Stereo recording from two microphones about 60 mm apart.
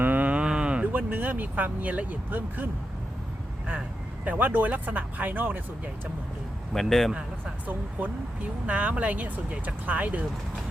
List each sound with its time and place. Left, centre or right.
0.0 s speech: right
4.3 s speech: right
6.8 s speech: centre
7.7 s speech: right